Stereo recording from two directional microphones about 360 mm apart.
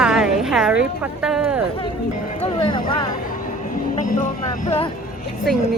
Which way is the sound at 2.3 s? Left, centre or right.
Centre.